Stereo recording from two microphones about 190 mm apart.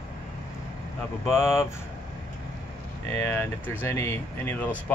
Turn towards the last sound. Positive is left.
turn(degrees=10)  # may be behind; listen again after turning